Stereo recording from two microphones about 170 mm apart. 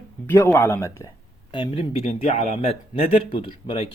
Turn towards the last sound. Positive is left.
turn(degrees=30)  # may be behind; listen again after turning